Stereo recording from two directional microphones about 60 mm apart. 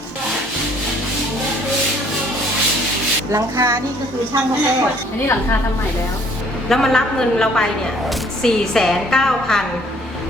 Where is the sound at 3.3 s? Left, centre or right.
Right.